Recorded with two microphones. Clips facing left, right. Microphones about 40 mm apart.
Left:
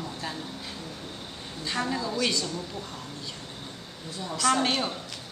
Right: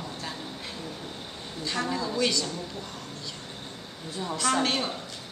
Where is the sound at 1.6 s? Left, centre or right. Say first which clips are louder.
Even; centre.